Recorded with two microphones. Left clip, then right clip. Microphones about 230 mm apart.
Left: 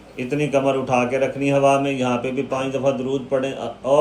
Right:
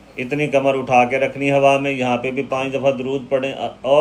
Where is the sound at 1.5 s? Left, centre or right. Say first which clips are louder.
Right 2 dB; right.